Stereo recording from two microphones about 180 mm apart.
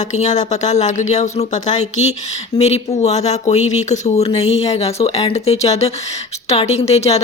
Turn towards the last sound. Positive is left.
turn(degrees=35)  # may be behind; listen again after turning